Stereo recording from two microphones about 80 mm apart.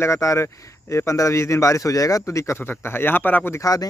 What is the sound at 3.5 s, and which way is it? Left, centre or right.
Speech, left.